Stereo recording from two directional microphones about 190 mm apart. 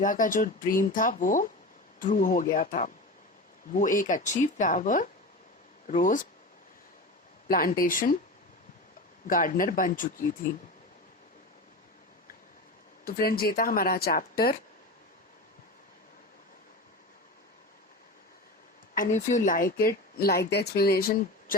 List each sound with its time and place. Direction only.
0.0 s speech: 45° left (ahead or behind)
7.4 s speech: 50° left (ahead or behind)
9.2 s speech: 45° left (ahead or behind)
13.1 s speech: 50° left (ahead or behind)
18.9 s speech: 40° left (ahead or behind)